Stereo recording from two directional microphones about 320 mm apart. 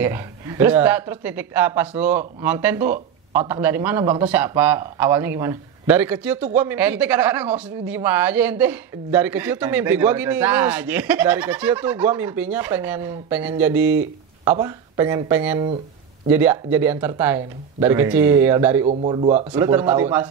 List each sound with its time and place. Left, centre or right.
0.0 s a man's voice: centre
18.9 s speech: centre